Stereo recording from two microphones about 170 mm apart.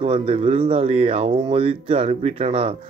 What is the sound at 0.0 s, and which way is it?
Speech, 35° right (ahead or behind).